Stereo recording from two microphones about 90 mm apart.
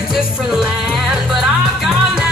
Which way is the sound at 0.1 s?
5° right (ahead or behind).